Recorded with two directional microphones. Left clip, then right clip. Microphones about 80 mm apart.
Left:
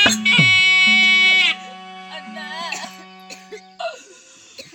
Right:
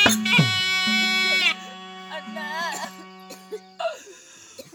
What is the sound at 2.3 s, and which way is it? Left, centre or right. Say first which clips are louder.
Music: even; right.